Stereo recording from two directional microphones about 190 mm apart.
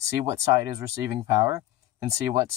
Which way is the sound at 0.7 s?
15° right (ahead or behind).